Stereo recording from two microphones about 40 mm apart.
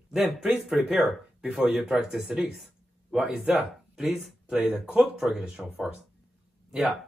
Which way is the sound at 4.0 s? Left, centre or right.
Centre.